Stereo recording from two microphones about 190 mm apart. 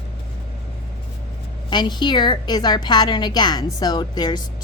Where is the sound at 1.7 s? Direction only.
20° left (ahead or behind).